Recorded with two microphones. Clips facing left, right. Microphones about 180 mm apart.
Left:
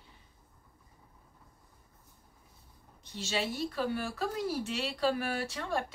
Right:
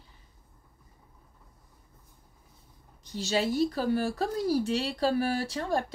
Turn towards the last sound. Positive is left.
turn(degrees=-40)  # may be behind; listen again after turning